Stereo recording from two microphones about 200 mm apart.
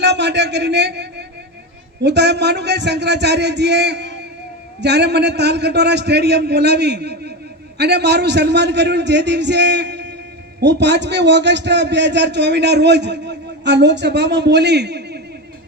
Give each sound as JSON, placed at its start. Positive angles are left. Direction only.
{"t": 0.0, "sound": "a man's voice", "side_deg": -60}
{"t": 2.0, "sound": "a man's voice", "side_deg": -60}